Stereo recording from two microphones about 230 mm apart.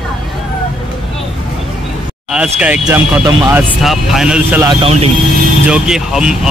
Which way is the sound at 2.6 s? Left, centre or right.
Centre.